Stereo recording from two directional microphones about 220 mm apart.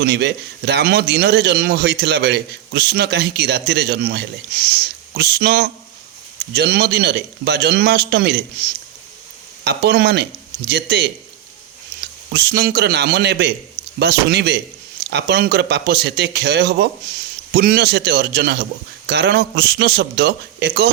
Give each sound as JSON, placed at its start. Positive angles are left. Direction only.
{"t": 0.0, "sound": "a man's voice", "side_deg": -50}
{"t": 9.6, "sound": "a man's voice", "side_deg": -50}
{"t": 12.3, "sound": "a man's voice", "side_deg": -45}